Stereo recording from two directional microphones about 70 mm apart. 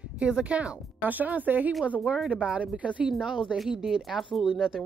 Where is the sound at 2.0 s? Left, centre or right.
Centre.